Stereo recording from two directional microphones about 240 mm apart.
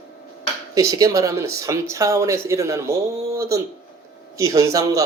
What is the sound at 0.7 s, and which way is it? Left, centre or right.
Speech, centre.